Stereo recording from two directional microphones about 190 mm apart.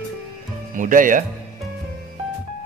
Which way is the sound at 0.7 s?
45° right (ahead or behind).